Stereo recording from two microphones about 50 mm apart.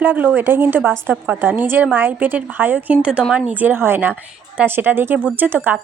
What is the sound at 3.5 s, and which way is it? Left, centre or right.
Speech, right.